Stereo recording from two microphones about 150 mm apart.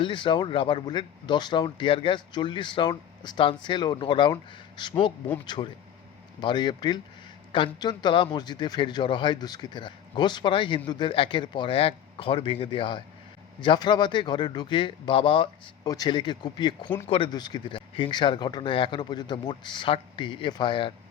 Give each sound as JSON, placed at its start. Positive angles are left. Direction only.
{"t": 0.0, "sound": "speech", "side_deg": 35}
{"t": 6.4, "sound": "speech", "side_deg": 30}